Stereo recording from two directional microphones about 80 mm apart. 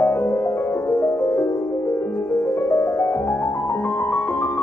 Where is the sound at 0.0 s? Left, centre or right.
Left.